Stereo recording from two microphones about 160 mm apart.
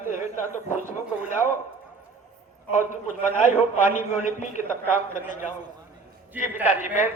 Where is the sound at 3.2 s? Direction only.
55° left (ahead or behind).